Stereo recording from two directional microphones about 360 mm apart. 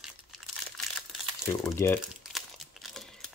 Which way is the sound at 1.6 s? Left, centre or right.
Centre.